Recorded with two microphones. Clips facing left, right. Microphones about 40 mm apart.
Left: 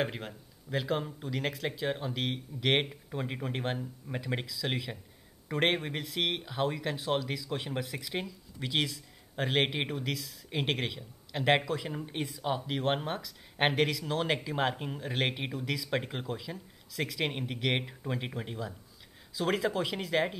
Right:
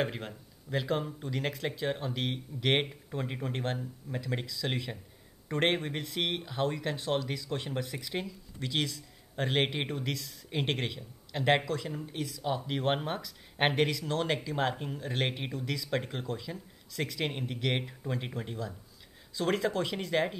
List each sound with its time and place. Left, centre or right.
0.0 s speech: centre
4.5 s speech: centre
11.9 s speech: left
12.4 s speech: centre